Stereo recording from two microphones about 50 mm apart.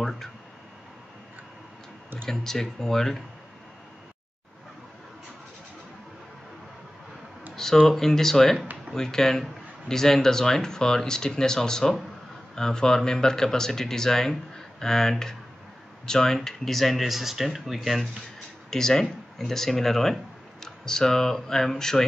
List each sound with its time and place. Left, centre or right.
2.2 s speech: centre
7.5 s speech: centre
18.7 s speech: centre